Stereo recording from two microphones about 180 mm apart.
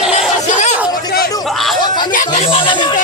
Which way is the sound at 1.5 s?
Centre (ahead or behind).